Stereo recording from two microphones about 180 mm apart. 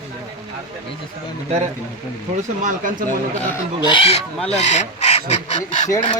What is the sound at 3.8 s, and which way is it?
Speech, 30° left (ahead or behind).